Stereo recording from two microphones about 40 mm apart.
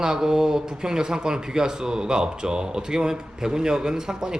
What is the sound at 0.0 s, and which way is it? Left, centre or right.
Speech, centre.